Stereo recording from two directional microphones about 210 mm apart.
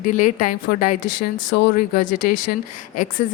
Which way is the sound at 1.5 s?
50° left (ahead or behind).